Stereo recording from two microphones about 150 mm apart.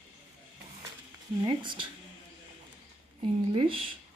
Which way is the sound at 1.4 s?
30° right (ahead or behind).